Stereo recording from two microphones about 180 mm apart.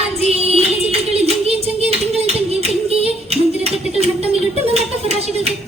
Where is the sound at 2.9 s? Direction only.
35° right (ahead or behind).